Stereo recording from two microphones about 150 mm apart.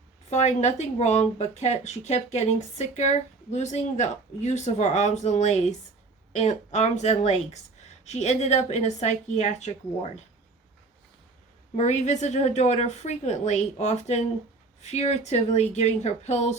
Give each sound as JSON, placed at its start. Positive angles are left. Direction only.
{"t": 0.3, "sound": "speech", "side_deg": 50}
{"t": 11.8, "sound": "speech", "side_deg": 50}